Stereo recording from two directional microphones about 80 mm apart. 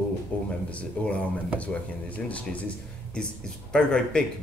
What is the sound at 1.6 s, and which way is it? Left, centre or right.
Speech, centre.